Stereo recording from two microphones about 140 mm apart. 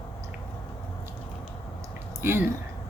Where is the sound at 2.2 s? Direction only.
15° right (ahead or behind).